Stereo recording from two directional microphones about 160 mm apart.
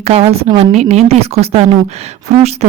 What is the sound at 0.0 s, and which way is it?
Speech, 40° right (ahead or behind).